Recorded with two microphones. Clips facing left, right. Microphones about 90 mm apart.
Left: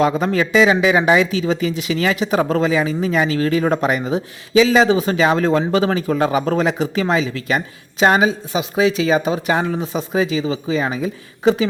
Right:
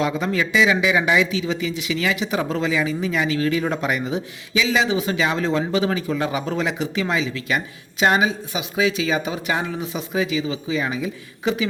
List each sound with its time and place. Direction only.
0.0 s speech: 45° left (ahead or behind)